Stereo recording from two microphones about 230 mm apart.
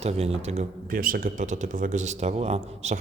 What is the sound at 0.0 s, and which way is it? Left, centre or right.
Speech, right.